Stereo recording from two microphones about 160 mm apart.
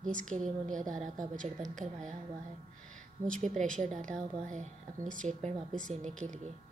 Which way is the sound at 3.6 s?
5° left (ahead or behind).